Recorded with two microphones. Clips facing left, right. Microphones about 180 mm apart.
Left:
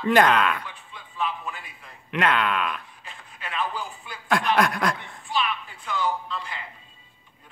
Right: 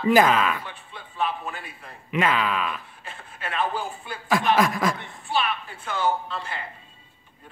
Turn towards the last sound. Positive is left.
turn(degrees=-50)  # may be behind; listen again after turning